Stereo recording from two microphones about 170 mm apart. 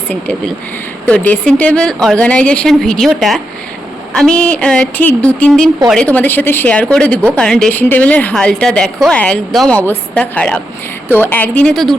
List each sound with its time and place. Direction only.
1.0 s a woman's voice: 10° left (ahead or behind)